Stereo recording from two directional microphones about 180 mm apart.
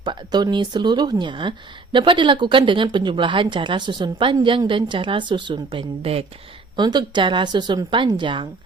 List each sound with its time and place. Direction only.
0.0 s speech: 25° right (ahead or behind)